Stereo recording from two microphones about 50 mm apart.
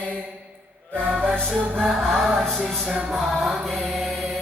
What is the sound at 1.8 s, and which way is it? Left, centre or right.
Music, centre.